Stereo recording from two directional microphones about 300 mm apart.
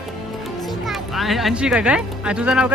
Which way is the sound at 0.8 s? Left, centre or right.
Centre.